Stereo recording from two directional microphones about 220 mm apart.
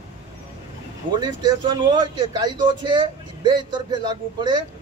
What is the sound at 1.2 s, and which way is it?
A man's voice, 20° right (ahead or behind).